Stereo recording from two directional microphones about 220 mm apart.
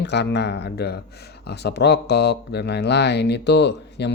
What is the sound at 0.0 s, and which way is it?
Speech, 50° left (ahead or behind).